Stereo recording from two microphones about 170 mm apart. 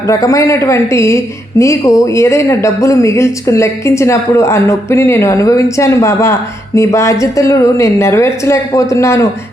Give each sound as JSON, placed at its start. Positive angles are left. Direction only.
{"t": 0.1, "sound": "a woman's voice", "side_deg": 20}